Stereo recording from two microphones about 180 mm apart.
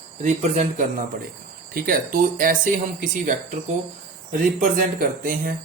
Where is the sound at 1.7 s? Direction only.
55° right (ahead or behind).